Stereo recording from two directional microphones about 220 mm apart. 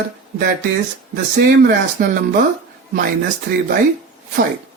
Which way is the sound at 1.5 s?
40° right (ahead or behind).